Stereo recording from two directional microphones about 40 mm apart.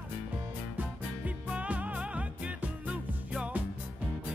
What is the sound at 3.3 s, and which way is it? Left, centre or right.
Music, right.